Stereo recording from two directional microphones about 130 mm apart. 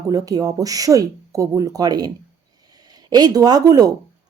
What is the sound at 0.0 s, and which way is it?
Speech, 25° right (ahead or behind).